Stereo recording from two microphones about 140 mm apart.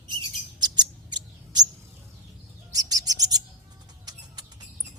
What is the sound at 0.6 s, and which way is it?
Chirp, 30° right (ahead or behind).